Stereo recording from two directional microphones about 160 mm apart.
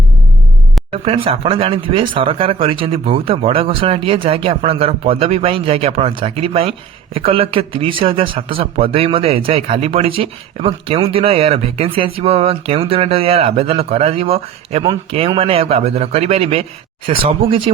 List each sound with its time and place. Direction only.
1.0 s speech: 35° right (ahead or behind)